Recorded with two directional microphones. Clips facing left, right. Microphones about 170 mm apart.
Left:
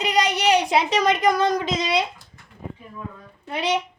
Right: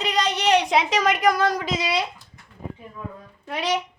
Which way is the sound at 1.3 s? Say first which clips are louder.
Right 1 dB; 20° left (ahead or behind).